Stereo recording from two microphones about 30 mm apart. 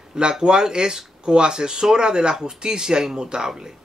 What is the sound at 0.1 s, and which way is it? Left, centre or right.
Speech, right.